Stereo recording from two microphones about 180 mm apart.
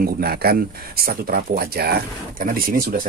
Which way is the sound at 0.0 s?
60° right (ahead or behind).